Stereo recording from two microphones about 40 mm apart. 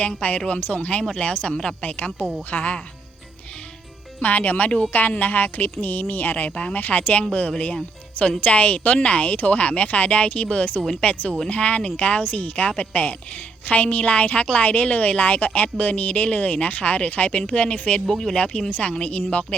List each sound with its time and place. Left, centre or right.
0.0 s speech: left
4.2 s speech: left
18.1 s speech: centre
18.3 s speech: left